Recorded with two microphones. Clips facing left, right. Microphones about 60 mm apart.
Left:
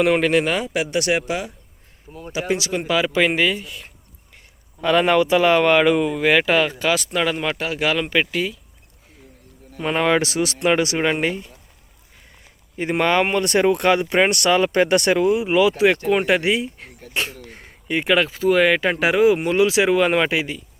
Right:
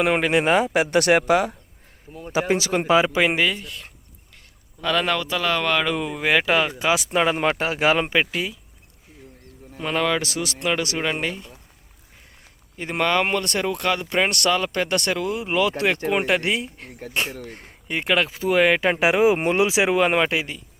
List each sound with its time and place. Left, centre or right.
0.0 s speech: centre
0.4 s speech: right
3.1 s speech: centre
4.8 s speech: centre
6.1 s speech: centre
7.1 s speech: right
8.1 s speech: centre
9.8 s speech: left
12.7 s speech: centre
15.4 s speech: centre